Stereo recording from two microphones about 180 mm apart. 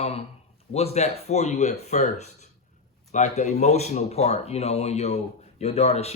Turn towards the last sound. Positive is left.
turn(degrees=35)  # may be behind; listen again after turning